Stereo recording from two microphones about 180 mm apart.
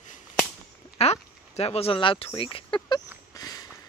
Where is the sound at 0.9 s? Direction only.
35° left (ahead or behind).